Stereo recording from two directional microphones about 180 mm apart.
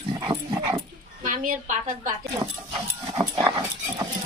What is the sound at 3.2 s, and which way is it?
Dog, 25° right (ahead or behind).